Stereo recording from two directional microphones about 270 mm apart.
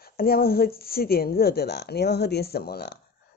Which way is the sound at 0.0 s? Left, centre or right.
Left.